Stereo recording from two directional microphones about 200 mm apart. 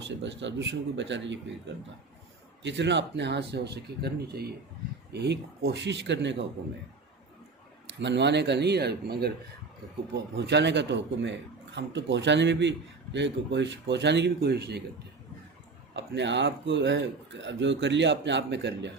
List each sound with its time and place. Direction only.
0.2 s speech: 65° right (ahead or behind)
2.6 s speech: 60° right (ahead or behind)
7.9 s speech: 60° right (ahead or behind)
16.0 s speech: 60° right (ahead or behind)